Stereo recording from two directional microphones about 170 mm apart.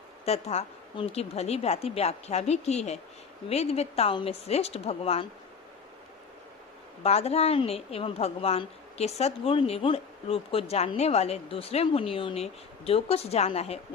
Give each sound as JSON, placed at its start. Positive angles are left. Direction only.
{"t": 0.3, "sound": "a woman's voice", "side_deg": 40}
{"t": 7.0, "sound": "a woman's voice", "side_deg": 35}